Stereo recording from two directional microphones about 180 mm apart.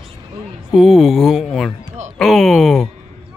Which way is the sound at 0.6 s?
Centre (ahead or behind).